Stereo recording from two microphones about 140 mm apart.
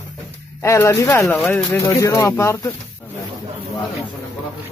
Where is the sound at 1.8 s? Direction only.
20° left (ahead or behind).